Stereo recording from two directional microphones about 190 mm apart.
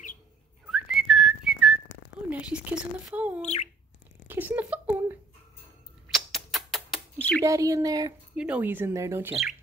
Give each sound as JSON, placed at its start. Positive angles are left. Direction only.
{"t": 0.7, "sound": "whistling", "side_deg": 0}
{"t": 2.2, "sound": "speech", "side_deg": -5}
{"t": 4.3, "sound": "a sound", "side_deg": -10}
{"t": 6.0, "sound": "bird", "side_deg": 0}
{"t": 7.4, "sound": "speech", "side_deg": -15}
{"t": 8.4, "sound": "speech", "side_deg": -5}